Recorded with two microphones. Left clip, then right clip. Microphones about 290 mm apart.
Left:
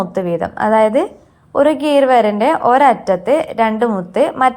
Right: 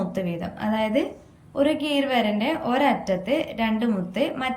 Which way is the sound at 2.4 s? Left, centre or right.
Left.